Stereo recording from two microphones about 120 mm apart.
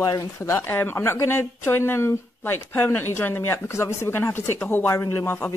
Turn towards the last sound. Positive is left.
turn(degrees=20)  # may be behind; listen again after turning